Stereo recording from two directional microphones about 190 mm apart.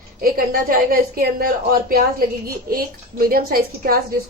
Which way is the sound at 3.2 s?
50° right (ahead or behind).